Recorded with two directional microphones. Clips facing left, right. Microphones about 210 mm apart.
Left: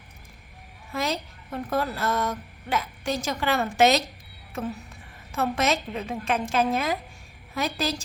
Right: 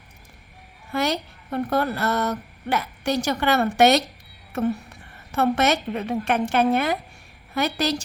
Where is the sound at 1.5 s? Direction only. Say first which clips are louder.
Right 4 dB; 65° right (ahead or behind).